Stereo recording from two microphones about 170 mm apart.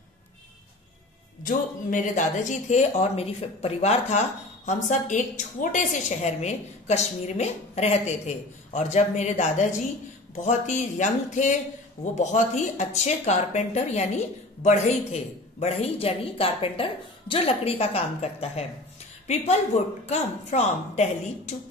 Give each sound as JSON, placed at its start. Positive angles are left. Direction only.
{"t": 1.4, "sound": "a woman's voice", "side_deg": 50}